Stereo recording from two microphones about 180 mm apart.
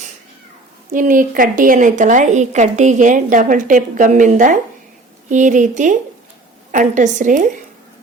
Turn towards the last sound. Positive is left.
turn(degrees=-45)  # may be behind; listen again after turning